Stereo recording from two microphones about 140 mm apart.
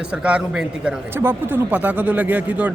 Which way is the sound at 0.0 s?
5° right (ahead or behind).